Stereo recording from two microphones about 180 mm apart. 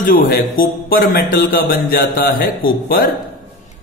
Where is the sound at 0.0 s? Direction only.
50° left (ahead or behind).